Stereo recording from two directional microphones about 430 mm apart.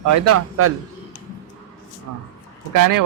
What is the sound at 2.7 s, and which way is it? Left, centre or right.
Speech, right.